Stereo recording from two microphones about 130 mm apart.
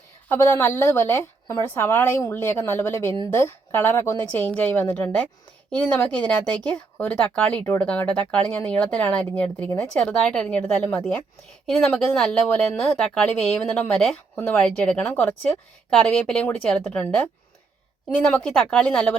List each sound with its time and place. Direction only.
0.3 s speech: 20° left (ahead or behind)